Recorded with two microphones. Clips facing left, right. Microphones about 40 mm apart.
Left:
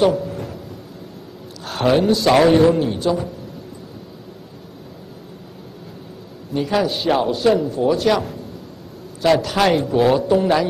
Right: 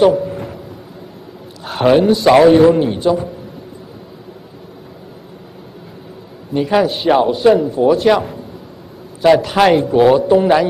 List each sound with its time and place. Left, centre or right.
0.0 s a sound: centre
1.7 s a man's voice: centre
2.6 s a man's voice: centre
6.5 s a man's voice: centre